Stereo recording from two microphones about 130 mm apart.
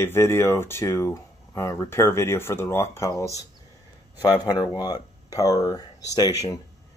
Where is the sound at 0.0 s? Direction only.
20° left (ahead or behind).